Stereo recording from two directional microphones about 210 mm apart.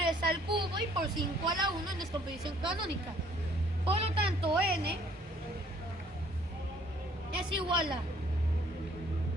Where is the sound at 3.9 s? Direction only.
25° right (ahead or behind).